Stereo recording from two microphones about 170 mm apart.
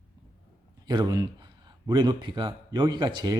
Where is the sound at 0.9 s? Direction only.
25° right (ahead or behind).